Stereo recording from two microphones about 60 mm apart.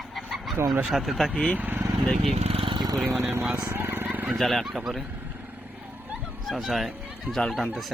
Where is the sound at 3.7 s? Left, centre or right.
Right.